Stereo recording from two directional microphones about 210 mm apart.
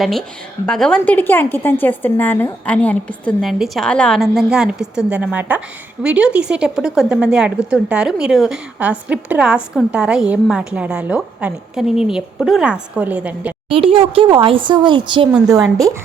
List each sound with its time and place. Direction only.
0.0 s a woman's voice: centre (ahead or behind)
13.7 s a woman's voice: 25° right (ahead or behind)